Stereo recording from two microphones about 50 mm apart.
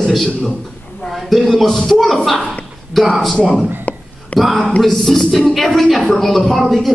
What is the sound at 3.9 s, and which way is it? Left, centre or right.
Whispering, left.